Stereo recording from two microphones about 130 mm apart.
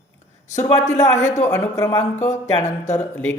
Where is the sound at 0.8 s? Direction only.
25° left (ahead or behind).